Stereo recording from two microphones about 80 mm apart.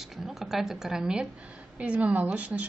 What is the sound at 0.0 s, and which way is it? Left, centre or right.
A woman's voice, centre.